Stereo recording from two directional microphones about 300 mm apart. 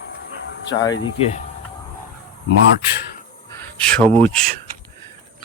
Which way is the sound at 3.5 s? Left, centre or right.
Centre.